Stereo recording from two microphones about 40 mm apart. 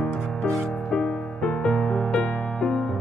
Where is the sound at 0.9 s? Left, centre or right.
Left.